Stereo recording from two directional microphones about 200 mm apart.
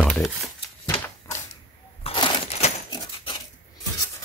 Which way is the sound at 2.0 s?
25° left (ahead or behind).